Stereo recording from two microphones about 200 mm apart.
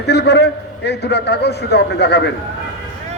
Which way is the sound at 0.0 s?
55° left (ahead or behind).